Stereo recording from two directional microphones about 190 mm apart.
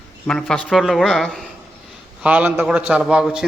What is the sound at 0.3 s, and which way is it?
A man's voice, 5° left (ahead or behind).